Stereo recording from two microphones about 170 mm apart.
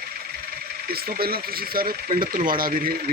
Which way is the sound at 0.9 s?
65° right (ahead or behind).